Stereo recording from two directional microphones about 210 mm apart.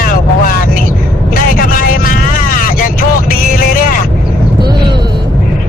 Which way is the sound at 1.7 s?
40° left (ahead or behind).